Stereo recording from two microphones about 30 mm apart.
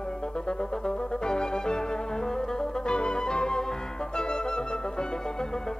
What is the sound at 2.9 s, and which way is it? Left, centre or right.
Flute, left.